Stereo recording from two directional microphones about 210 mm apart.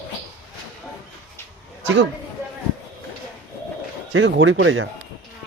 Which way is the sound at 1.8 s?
55° right (ahead or behind).